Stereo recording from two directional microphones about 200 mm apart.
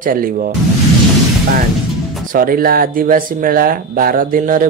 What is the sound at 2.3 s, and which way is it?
Speech, 45° right (ahead or behind).